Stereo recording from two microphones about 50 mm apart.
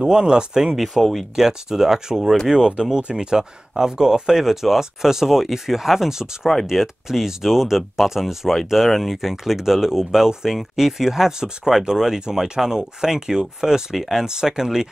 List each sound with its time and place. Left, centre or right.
0.0 s speech: centre
0.7 s speech: centre